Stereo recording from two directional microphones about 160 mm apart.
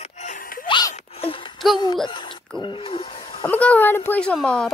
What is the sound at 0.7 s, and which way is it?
Zipper, 30° left (ahead or behind).